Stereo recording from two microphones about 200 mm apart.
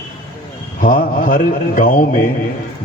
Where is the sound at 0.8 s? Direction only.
45° left (ahead or behind).